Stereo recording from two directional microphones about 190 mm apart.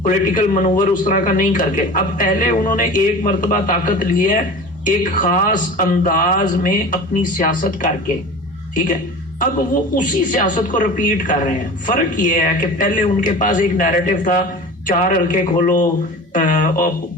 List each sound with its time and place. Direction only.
0.0 s a man's voice: 45° left (ahead or behind)